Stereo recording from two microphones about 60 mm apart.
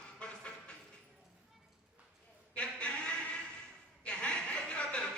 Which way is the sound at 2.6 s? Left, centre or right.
Centre.